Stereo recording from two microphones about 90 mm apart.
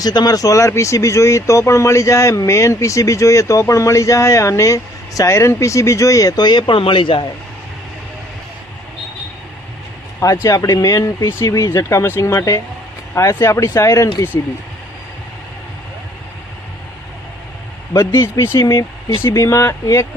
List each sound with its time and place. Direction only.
0.0 s speech: 50° left (ahead or behind)
6.7 s speech: 80° left
10.2 s speech: 35° left (ahead or behind)
18.2 s speech: 30° left (ahead or behind)